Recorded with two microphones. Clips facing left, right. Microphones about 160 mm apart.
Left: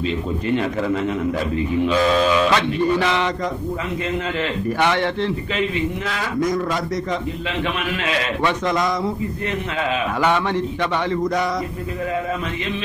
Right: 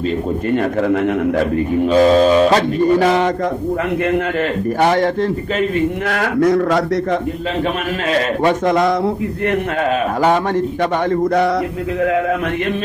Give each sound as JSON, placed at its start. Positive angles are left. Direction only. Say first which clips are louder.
{"t": 0.5, "sound": "a man's voice", "louder": "right 4 dB", "side_deg": -55}
{"t": 1.8, "sound": "mantra", "louder": "right 7 dB", "side_deg": -40}
{"t": 4.7, "sound": "a man's voice", "louder": "right 6 dB", "side_deg": -40}
{"t": 8.1, "sound": "a man's voice", "louder": "right 7 dB", "side_deg": -50}
{"t": 10.2, "sound": "mantra", "louder": "right 4 dB", "side_deg": -45}